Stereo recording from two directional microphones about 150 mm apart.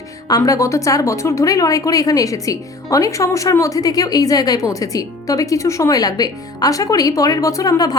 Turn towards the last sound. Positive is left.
turn(degrees=25)  # may be behind; listen again after turning